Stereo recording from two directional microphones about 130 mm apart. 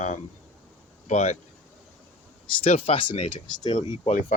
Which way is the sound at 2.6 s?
50° left (ahead or behind).